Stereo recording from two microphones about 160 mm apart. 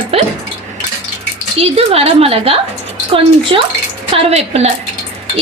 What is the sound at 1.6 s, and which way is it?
A woman's voice, 40° right (ahead or behind).